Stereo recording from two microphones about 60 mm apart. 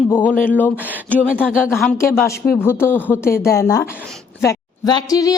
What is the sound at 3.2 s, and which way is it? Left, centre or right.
Speech, left.